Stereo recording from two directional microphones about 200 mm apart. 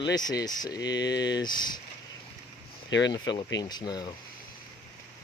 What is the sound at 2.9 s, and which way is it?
Speech, 65° left (ahead or behind).